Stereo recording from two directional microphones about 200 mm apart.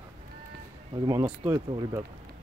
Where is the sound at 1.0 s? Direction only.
15° right (ahead or behind).